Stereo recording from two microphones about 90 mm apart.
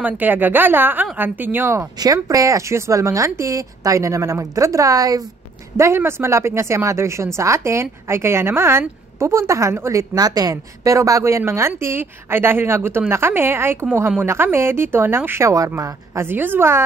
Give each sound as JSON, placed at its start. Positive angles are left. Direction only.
{"t": 0.0, "sound": "speech", "side_deg": -20}
{"t": 2.2, "sound": "speech", "side_deg": -40}
{"t": 5.8, "sound": "speech", "side_deg": -30}
{"t": 10.1, "sound": "speech", "side_deg": -45}